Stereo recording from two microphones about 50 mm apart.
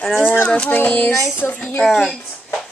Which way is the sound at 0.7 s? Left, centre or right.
Left.